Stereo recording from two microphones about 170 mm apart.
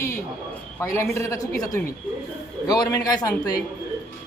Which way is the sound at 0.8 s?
15° left (ahead or behind).